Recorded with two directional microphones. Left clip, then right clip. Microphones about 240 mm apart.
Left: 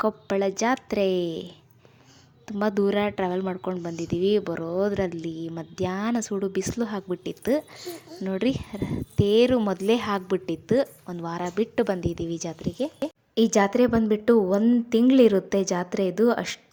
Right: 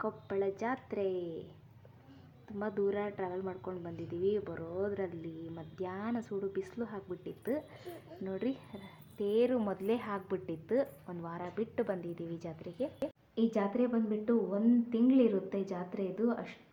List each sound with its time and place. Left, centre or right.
0.0 s a woman's voice: left
2.5 s a woman's voice: left